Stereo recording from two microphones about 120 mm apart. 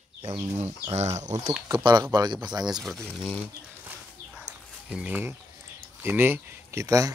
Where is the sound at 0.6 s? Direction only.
65° right (ahead or behind).